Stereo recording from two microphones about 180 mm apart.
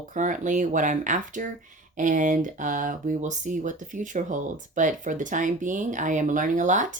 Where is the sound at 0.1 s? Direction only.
45° right (ahead or behind).